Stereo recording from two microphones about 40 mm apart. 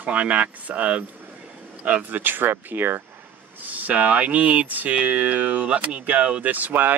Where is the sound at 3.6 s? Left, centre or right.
Right.